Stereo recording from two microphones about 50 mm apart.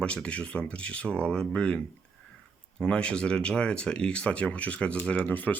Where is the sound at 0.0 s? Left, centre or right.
Left.